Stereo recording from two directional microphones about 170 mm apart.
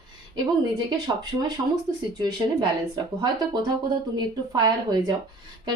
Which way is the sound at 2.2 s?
25° right (ahead or behind).